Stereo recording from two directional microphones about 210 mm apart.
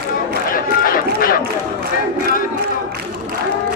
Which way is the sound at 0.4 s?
40° left (ahead or behind).